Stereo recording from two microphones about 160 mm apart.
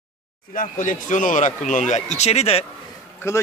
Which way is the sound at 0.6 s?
55° left (ahead or behind).